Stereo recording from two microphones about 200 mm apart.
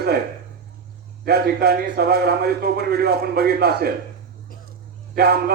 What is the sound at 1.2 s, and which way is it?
A man's voice, 50° right (ahead or behind).